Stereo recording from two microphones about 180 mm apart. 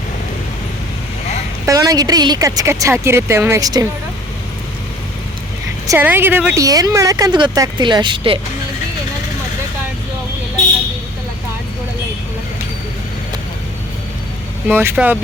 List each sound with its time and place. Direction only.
1.6 s speech: 20° right (ahead or behind)
5.9 s speech: 10° right (ahead or behind); by 8.4 s 30° right (ahead or behind)
14.7 s speech: 10° right (ahead or behind)